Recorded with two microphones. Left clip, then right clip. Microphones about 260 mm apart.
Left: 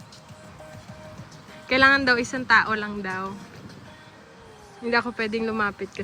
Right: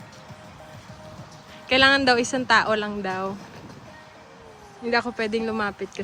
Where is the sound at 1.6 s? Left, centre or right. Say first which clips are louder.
Even; centre.